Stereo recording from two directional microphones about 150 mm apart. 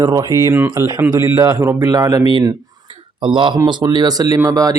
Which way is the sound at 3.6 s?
30° right (ahead or behind).